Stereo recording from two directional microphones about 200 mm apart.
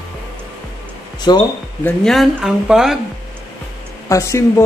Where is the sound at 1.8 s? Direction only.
Centre (ahead or behind).